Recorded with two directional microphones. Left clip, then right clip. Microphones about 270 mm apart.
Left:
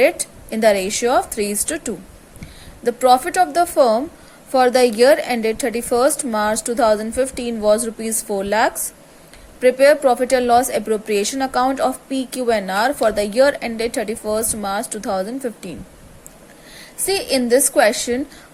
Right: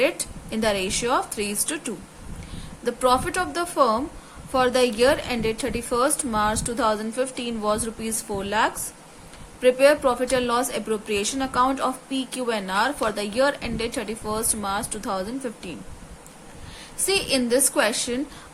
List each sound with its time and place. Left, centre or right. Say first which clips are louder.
0.5 s a woman's voice: left 8 dB; centre
17.1 s a woman's voice: left 5 dB; centre